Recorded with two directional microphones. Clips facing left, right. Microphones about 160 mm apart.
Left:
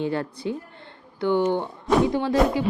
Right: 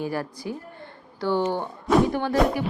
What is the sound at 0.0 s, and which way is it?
Speech, 25° left (ahead or behind).